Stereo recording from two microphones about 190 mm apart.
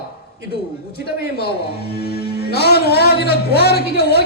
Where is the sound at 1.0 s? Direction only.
55° left (ahead or behind).